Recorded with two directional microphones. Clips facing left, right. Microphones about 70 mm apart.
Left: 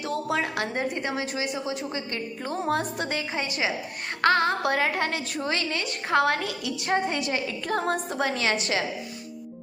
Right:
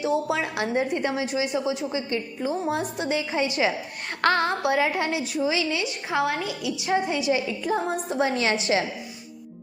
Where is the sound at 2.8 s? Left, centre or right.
Left.